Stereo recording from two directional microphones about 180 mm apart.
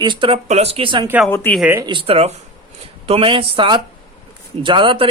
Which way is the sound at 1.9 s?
30° right (ahead or behind).